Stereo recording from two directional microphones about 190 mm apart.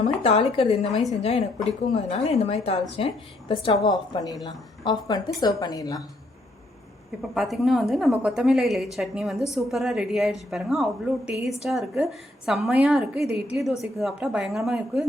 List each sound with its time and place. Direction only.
0.0 s a woman's voice: 30° left (ahead or behind)
7.2 s a woman's voice: centre (ahead or behind)